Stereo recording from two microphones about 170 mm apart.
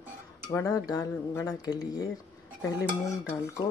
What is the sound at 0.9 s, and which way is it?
Speech, 20° left (ahead or behind).